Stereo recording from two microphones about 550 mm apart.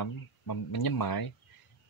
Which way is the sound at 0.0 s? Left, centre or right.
Left.